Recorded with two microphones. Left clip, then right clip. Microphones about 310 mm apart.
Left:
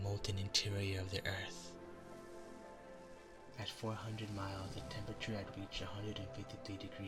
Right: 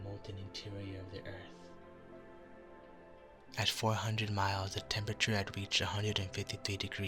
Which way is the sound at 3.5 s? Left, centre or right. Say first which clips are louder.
Right 11 dB; right.